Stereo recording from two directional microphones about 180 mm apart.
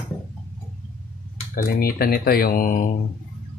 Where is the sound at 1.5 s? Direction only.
55° left (ahead or behind).